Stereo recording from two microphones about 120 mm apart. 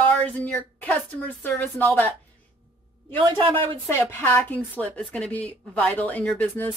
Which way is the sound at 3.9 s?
20° left (ahead or behind).